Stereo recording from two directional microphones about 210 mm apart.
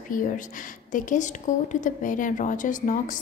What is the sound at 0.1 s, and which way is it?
A woman's voice, 40° left (ahead or behind).